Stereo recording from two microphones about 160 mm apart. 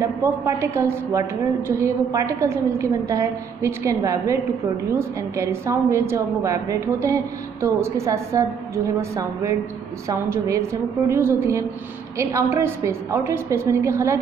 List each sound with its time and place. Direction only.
0.0 s a woman's voice: 20° right (ahead or behind)